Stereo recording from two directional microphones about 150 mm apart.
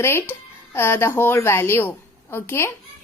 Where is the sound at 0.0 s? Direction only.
15° left (ahead or behind).